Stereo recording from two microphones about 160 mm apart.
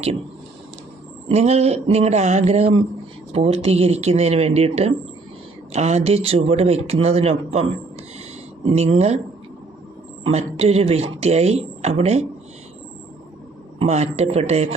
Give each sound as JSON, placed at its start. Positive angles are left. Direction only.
{"t": 1.3, "sound": "speech", "side_deg": -40}
{"t": 10.2, "sound": "speech", "side_deg": -40}
{"t": 13.7, "sound": "speech", "side_deg": -40}